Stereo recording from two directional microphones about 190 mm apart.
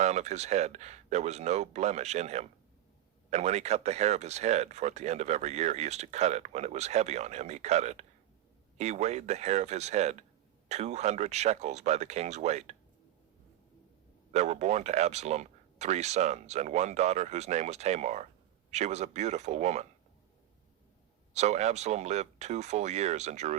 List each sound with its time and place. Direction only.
0.0 s speech: 35° right (ahead or behind)
14.3 s speech: 35° right (ahead or behind)
21.3 s speech: 35° right (ahead or behind)